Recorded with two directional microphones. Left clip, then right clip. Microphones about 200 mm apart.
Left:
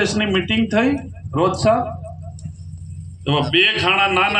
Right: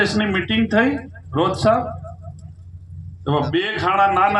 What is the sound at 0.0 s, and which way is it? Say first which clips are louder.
Speech: even; 25° right (ahead or behind).